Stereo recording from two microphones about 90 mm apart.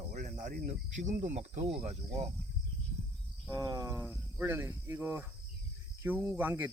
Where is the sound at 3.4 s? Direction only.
45° right (ahead or behind).